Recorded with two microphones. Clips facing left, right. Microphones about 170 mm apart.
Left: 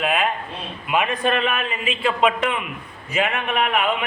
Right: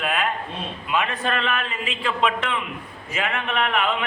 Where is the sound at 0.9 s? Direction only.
15° left (ahead or behind).